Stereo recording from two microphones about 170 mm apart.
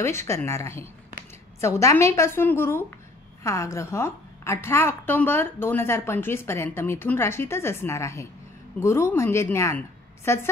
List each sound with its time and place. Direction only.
0.0 s a woman's voice: 15° left (ahead or behind)